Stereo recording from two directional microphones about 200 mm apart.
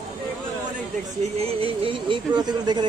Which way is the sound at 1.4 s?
30° right (ahead or behind).